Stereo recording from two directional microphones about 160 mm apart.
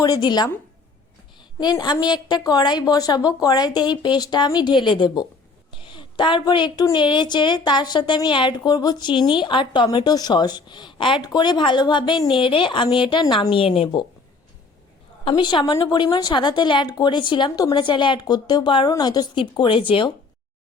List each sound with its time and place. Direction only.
0.0 s a woman's voice: 25° left (ahead or behind)
1.5 s a woman's voice: 25° left (ahead or behind)
15.2 s a woman's voice: 30° left (ahead or behind)